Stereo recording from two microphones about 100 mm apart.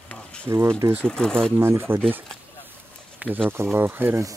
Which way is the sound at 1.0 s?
5° left (ahead or behind).